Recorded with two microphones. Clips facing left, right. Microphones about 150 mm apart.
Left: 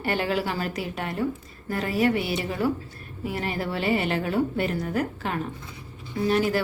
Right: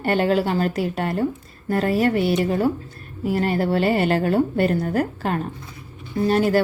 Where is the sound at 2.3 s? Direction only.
55° right (ahead or behind).